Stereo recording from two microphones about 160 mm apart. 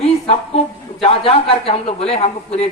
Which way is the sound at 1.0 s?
40° left (ahead or behind).